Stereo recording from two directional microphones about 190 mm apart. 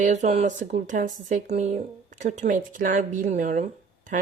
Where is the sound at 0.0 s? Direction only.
40° right (ahead or behind).